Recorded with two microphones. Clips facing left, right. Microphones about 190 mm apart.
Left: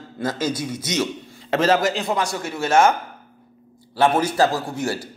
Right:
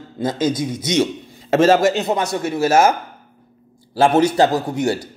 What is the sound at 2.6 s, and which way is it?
Speech, 40° right (ahead or behind).